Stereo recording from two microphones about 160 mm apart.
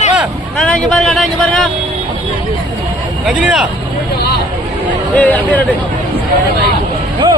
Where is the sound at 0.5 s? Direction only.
Centre (ahead or behind).